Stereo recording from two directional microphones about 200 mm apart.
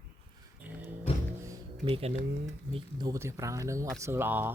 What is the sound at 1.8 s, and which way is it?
Speech, 30° right (ahead or behind).